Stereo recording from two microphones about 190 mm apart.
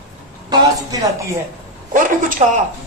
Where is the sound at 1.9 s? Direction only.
45° right (ahead or behind).